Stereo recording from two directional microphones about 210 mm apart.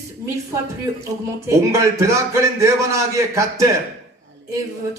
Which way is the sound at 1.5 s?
15° right (ahead or behind).